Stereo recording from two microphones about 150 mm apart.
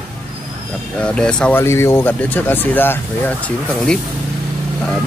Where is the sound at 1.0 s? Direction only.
5° left (ahead or behind).